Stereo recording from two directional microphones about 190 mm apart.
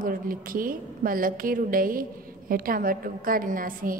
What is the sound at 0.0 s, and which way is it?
A woman's voice, 50° right (ahead or behind).